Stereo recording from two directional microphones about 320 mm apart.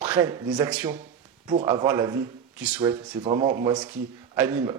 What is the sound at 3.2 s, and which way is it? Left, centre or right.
Speech, centre.